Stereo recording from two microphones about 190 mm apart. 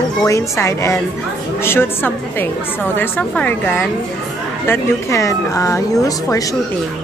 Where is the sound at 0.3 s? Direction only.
15° left (ahead or behind).